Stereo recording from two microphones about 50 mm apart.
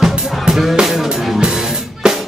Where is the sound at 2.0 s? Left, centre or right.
Centre.